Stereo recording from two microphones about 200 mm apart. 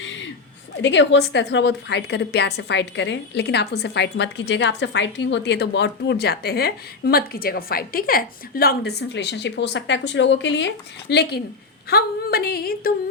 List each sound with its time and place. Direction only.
0.8 s a woman's voice: 65° left (ahead or behind)